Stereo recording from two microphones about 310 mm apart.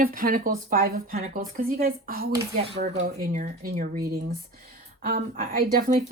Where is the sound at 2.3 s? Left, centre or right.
Centre.